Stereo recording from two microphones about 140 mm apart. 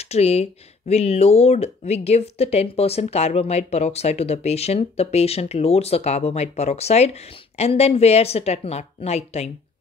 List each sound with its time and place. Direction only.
0.0 s speech: 50° left (ahead or behind)